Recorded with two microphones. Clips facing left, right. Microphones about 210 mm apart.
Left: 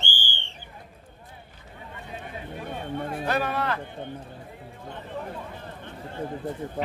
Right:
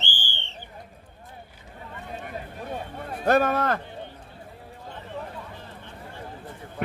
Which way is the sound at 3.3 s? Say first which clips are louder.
Right 7 dB; 45° right (ahead or behind).